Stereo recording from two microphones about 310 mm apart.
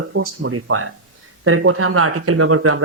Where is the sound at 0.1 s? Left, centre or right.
Right.